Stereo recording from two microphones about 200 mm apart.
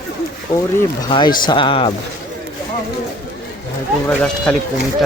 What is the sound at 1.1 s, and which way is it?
Speech, 25° left (ahead or behind).